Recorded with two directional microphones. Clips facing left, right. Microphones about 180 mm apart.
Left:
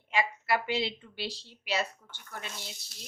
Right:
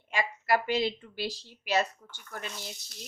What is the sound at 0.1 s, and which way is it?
A woman's voice, 45° right (ahead or behind).